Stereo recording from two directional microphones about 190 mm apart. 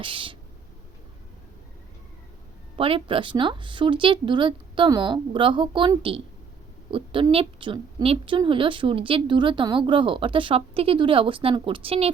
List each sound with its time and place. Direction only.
0.0 s a woman's voice: 25° right (ahead or behind)
2.7 s a woman's voice: 30° right (ahead or behind)